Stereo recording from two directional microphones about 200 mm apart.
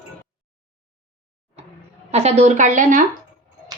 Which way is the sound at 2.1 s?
35° right (ahead or behind).